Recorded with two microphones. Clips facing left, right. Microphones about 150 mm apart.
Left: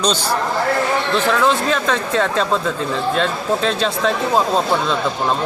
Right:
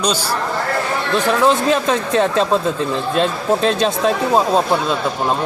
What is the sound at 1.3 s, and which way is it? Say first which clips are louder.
Speech: right 4 dB; 20° right (ahead or behind).